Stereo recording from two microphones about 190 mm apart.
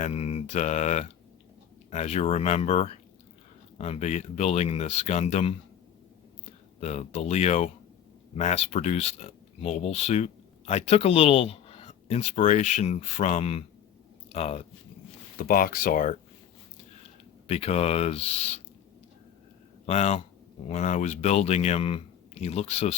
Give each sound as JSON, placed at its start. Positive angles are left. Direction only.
{"t": 0.0, "sound": "speech", "side_deg": 35}
{"t": 6.7, "sound": "speech", "side_deg": 35}
{"t": 15.4, "sound": "speech", "side_deg": 50}
{"t": 17.5, "sound": "speech", "side_deg": 30}
{"t": 19.8, "sound": "speech", "side_deg": 35}